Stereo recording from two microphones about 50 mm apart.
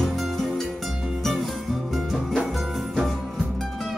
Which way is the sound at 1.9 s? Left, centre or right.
Centre.